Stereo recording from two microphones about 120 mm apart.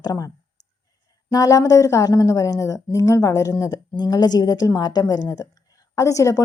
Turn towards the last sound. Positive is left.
turn(degrees=25)  # may be behind; listen again after turning